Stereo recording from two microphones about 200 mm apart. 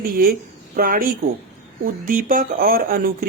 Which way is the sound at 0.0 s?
45° right (ahead or behind).